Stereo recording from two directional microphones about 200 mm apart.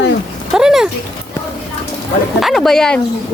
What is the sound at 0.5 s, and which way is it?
Speech, centre (ahead or behind).